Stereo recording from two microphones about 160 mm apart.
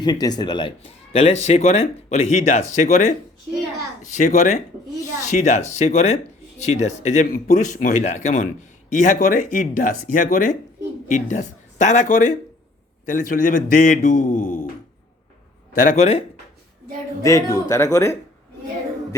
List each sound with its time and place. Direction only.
0.0 s speech: 25° left (ahead or behind)
1.1 s a man's voice: 40° left (ahead or behind); by 14.7 s 55° left (ahead or behind)
15.7 s speech: 55° left (ahead or behind)
17.2 s speech: 20° left (ahead or behind)